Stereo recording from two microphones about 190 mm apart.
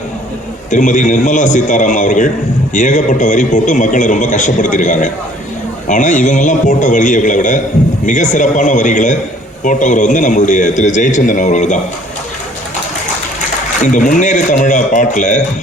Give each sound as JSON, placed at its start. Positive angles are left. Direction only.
{"t": 0.7, "sound": "a man's voice", "side_deg": 40}
{"t": 13.8, "sound": "a man's voice", "side_deg": 40}